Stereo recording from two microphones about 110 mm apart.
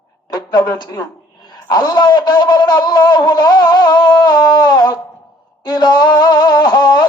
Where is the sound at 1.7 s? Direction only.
40° left (ahead or behind).